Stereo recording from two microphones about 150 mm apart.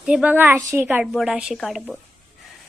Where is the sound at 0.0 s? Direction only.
5° right (ahead or behind).